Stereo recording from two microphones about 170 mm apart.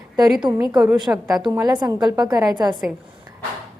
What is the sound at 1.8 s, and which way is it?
A woman's voice, 25° right (ahead or behind).